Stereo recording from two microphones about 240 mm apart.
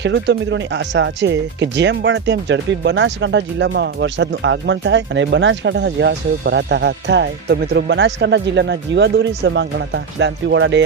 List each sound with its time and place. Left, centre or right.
0.0 s speech: right